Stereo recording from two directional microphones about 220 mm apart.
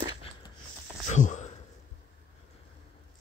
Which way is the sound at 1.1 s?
35° left (ahead or behind).